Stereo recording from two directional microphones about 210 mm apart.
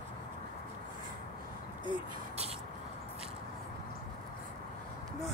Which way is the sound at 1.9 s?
30° right (ahead or behind).